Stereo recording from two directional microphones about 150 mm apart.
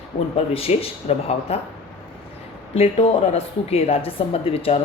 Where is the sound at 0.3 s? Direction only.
45° left (ahead or behind).